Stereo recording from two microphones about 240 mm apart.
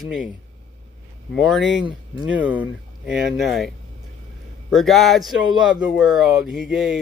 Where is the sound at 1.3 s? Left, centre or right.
Centre.